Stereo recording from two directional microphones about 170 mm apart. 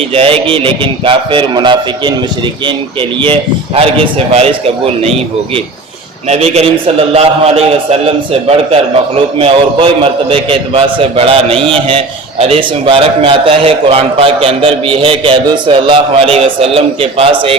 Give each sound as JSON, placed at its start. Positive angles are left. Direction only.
{"t": 0.1, "sound": "a man's voice", "side_deg": -35}
{"t": 3.8, "sound": "a man's voice", "side_deg": -35}
{"t": 6.2, "sound": "a man's voice", "side_deg": -40}